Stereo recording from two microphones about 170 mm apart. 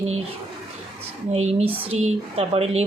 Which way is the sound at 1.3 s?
40° right (ahead or behind).